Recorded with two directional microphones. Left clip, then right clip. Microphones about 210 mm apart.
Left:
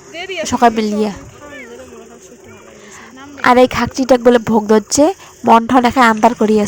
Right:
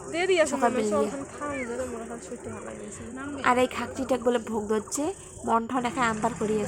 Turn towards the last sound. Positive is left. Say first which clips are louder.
# left 16 dB
turn(degrees=50)  # may be behind; listen again after turning